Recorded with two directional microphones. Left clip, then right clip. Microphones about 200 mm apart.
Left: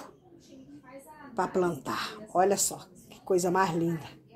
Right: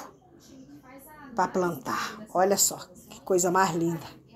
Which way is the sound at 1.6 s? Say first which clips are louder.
Right 1 dB; centre (ahead or behind).